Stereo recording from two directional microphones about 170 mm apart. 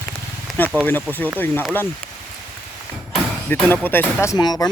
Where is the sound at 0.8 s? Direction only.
10° left (ahead or behind).